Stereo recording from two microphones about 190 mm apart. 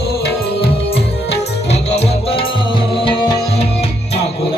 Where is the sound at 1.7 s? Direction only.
30° left (ahead or behind).